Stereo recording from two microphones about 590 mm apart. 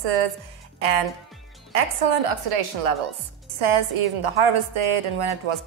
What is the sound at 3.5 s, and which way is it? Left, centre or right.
A woman's voice, right.